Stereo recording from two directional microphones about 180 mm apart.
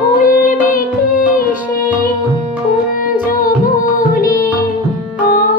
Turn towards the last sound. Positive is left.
turn(degrees=50)  # may be behind; listen again after turning